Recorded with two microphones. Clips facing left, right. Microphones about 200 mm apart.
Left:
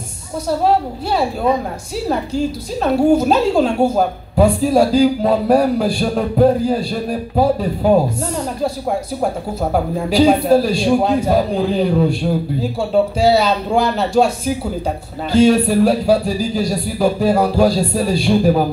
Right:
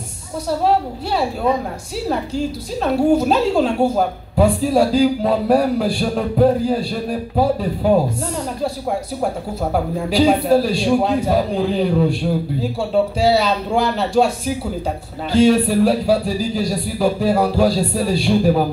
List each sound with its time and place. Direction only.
2.8 s a woman's voice: 45° left (ahead or behind)
9.2 s a woman's voice: 45° left (ahead or behind)